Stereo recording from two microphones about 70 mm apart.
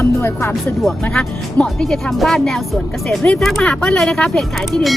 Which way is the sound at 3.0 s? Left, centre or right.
Centre.